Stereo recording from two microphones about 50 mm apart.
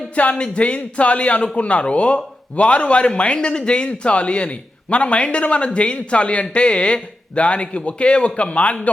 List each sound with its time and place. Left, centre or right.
0.2 s speech: left